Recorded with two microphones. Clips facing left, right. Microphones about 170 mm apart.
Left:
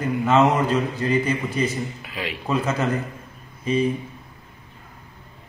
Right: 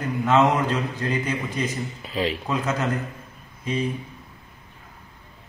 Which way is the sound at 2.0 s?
35° right (ahead or behind).